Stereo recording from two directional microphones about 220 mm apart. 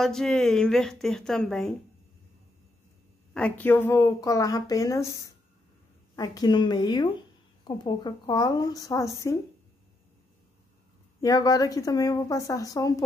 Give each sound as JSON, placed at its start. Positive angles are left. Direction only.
{"t": 0.0, "sound": "a woman's voice", "side_deg": 0}
{"t": 3.3, "sound": "a woman's voice", "side_deg": 5}
{"t": 11.1, "sound": "a woman's voice", "side_deg": 15}